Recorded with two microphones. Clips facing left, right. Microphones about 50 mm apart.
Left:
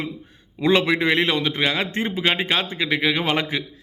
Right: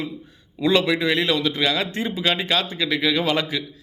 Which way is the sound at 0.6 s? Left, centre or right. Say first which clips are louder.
Left 1 dB; left.